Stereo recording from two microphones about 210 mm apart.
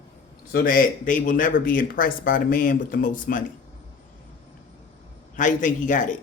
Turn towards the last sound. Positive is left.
turn(degrees=35)  # may be behind; listen again after turning